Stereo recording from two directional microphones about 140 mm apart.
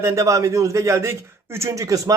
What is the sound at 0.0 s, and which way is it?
A man's voice, 20° right (ahead or behind).